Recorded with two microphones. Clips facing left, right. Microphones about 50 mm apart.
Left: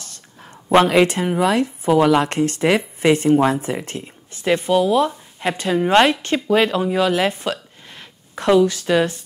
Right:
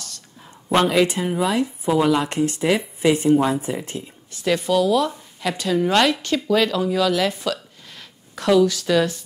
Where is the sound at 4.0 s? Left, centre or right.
Left.